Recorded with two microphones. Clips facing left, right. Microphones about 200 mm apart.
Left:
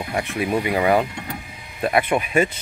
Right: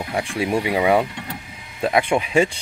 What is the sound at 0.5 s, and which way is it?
Speech, 10° right (ahead or behind).